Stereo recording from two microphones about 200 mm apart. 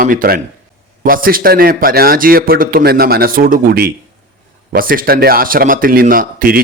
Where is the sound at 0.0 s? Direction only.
45° right (ahead or behind).